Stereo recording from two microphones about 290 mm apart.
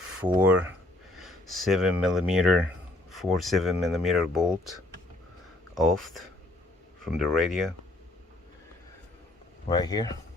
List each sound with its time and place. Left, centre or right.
0.2 s speech: centre
9.6 s speech: centre